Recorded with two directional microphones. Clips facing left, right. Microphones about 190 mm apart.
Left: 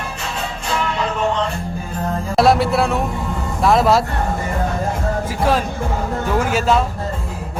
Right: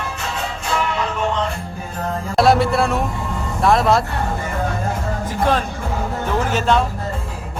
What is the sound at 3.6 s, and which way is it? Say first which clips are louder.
Speech: left 1 dB; centre (ahead or behind).